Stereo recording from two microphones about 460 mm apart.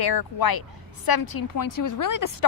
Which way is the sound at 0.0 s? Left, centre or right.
Left.